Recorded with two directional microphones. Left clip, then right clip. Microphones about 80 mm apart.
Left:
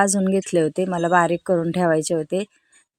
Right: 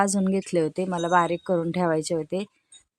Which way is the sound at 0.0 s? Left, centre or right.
Left.